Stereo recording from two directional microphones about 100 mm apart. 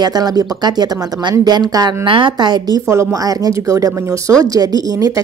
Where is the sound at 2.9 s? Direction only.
35° right (ahead or behind).